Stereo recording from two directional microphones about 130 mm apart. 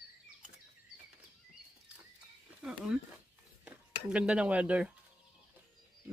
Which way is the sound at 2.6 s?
5° right (ahead or behind).